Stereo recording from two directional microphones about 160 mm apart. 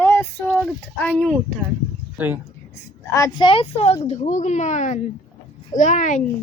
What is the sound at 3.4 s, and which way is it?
A woman's voice, 35° left (ahead or behind).